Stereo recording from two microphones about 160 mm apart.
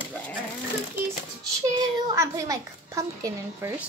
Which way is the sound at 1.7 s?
20° right (ahead or behind).